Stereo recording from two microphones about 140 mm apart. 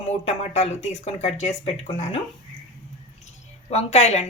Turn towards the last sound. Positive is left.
turn(degrees=50)  # may be behind; listen again after turning